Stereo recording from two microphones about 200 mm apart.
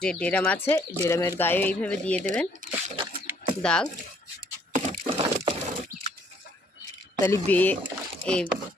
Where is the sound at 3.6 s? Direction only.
5° left (ahead or behind).